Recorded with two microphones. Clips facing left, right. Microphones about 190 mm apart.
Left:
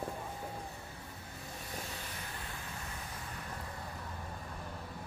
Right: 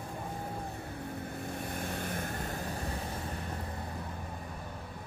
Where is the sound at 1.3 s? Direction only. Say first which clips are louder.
Right 7 dB; 55° right (ahead or behind); by 3.2 s 35° right (ahead or behind).